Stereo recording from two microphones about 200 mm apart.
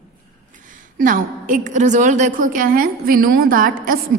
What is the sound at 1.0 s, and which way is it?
A woman's voice, 45° right (ahead or behind).